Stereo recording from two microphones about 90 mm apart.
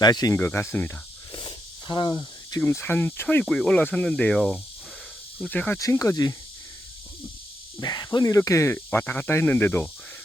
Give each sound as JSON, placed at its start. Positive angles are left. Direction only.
{"t": 0.0, "sound": "speech", "side_deg": 50}
{"t": 0.3, "sound": "speech", "side_deg": 25}
{"t": 1.3, "sound": "snake", "side_deg": 55}
{"t": 2.6, "sound": "speech", "side_deg": 25}
{"t": 3.4, "sound": "speech", "side_deg": 10}
{"t": 5.8, "sound": "speech", "side_deg": 35}
{"t": 7.8, "sound": "speech", "side_deg": 45}
{"t": 8.7, "sound": "speech", "side_deg": 25}